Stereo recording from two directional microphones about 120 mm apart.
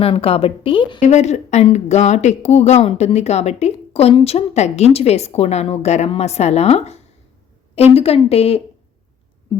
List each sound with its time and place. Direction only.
0.0 s a woman's voice: 50° left (ahead or behind)
1.0 s speech: 75° left (ahead or behind)